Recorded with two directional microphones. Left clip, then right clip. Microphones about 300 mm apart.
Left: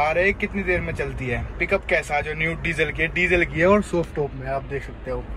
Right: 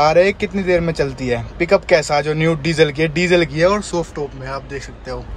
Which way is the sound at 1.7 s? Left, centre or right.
Right.